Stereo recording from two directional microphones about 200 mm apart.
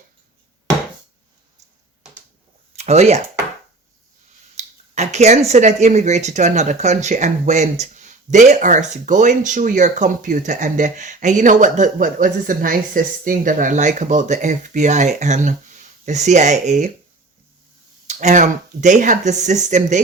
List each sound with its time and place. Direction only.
2.7 s speech: 35° right (ahead or behind)
4.5 s speech: 35° right (ahead or behind)
18.1 s speech: 35° right (ahead or behind)